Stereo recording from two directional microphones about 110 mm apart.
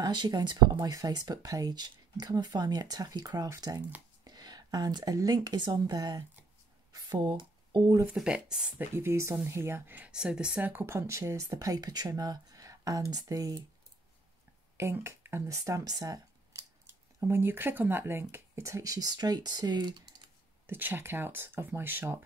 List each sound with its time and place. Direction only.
0.0 s speech: 40° right (ahead or behind)
8.1 s speech: 5° right (ahead or behind)
8.9 s speech: 25° right (ahead or behind)
14.8 s speech: 25° right (ahead or behind); by 20.0 s 40° right (ahead or behind)
20.6 s speech: 20° right (ahead or behind)